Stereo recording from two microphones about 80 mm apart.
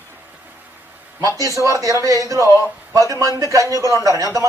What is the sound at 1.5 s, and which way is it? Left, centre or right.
A man's voice, right.